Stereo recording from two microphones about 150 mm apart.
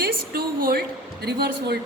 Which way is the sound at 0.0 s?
90° right.